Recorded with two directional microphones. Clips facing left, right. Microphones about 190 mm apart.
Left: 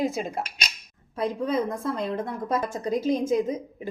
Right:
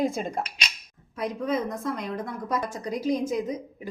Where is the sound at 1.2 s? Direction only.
30° left (ahead or behind).